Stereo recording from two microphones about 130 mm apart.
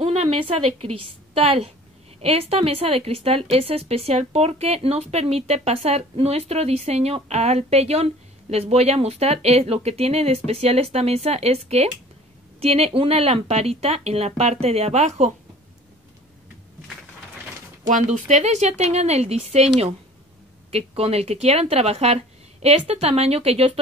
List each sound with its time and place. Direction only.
0.0 s a woman's voice: 50° right (ahead or behind)
17.8 s speech: 70° right (ahead or behind); by 19.7 s 55° right (ahead or behind)
20.7 s speech: 50° right (ahead or behind)